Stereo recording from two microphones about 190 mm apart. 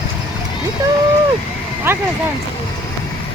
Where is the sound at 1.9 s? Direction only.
10° right (ahead or behind).